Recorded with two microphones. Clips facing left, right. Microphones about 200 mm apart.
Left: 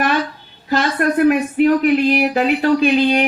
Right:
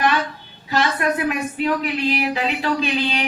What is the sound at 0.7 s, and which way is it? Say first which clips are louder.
A man's voice: left 4 dB; 55° left (ahead or behind).